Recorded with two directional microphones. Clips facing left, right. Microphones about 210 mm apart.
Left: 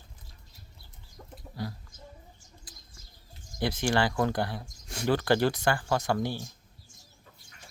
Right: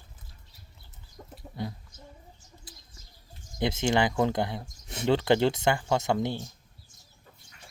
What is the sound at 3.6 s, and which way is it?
Speech, 20° right (ahead or behind).